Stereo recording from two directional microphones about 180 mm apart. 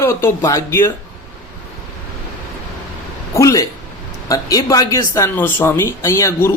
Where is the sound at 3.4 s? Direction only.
20° left (ahead or behind).